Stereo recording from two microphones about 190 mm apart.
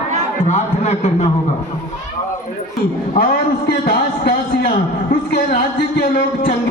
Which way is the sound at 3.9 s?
55° left (ahead or behind).